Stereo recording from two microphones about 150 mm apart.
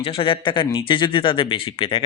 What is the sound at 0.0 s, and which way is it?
Speech, 35° left (ahead or behind).